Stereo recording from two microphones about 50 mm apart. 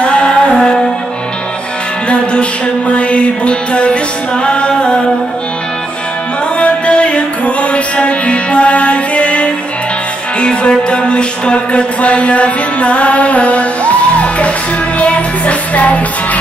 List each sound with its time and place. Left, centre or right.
0.0 s music: centre
2.0 s music: left
6.6 s music: left
15.0 s music: left